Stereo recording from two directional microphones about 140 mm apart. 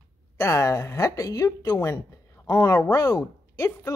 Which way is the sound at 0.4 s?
20° left (ahead or behind).